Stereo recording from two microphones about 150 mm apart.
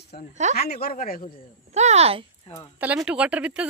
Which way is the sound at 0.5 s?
90° left.